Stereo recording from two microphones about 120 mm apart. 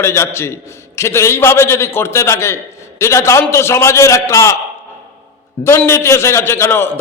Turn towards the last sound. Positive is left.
turn(degrees=20)  # may be behind; listen again after turning